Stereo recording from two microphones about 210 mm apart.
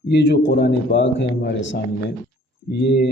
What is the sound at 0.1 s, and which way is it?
Speech, 55° left (ahead or behind).